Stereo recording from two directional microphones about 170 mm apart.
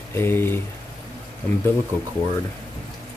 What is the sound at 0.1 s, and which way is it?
Speech, 15° left (ahead or behind).